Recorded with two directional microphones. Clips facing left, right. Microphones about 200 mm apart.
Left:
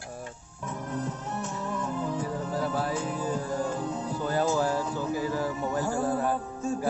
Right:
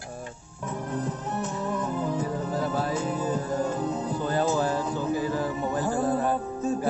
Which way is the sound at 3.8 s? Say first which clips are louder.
Right 3 dB; 40° right (ahead or behind).